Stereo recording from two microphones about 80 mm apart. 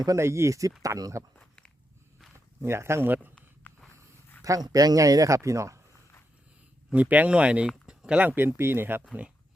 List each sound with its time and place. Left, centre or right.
0.2 s speech: right
1.4 s walk: centre
2.6 s speech: right
3.6 s walk: left
4.4 s speech: right
6.9 s speech: centre